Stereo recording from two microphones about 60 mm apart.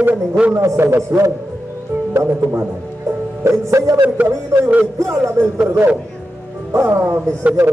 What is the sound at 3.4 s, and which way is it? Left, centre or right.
Speech, right.